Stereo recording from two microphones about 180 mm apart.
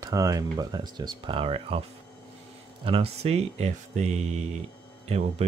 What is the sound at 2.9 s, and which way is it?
Speech, 30° right (ahead or behind).